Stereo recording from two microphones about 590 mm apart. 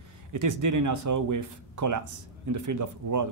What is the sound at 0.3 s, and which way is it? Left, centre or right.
Speech, right.